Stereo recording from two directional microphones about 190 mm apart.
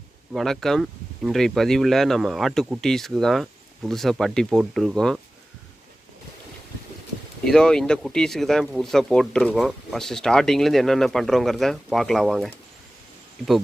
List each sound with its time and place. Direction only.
0.3 s speech: centre (ahead or behind)
7.4 s speech: 5° left (ahead or behind)